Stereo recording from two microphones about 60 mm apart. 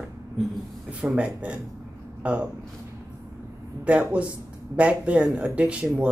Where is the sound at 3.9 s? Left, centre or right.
Centre.